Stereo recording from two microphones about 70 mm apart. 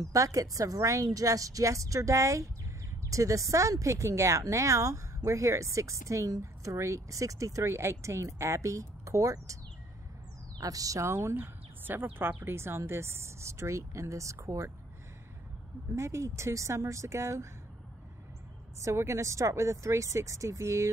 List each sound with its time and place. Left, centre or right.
0.0 s a woman's voice: right
10.6 s speech: right
11.1 s speech: right
15.9 s a woman's voice: right
18.8 s a woman's voice: right